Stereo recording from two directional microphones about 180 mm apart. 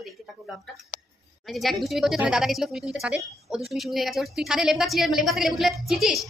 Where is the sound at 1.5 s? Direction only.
Centre (ahead or behind).